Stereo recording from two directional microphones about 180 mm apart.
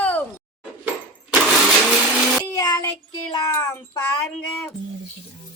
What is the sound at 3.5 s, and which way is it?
Child singing, 15° left (ahead or behind).